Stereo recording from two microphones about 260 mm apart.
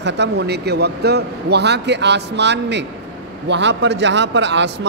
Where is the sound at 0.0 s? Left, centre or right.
Right.